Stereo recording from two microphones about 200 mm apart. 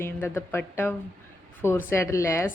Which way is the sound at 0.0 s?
10° left (ahead or behind).